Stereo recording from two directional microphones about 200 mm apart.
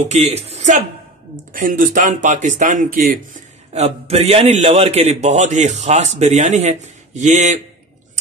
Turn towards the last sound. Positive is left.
turn(degrees=-35)  # may be behind; listen again after turning